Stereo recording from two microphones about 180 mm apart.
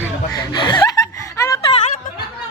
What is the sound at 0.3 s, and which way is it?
Chuckle, 25° left (ahead or behind).